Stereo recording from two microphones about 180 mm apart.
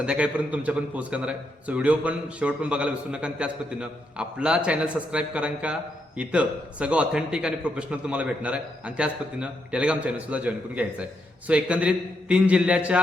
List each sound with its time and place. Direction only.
0.0 s a man's voice: 5° right (ahead or behind)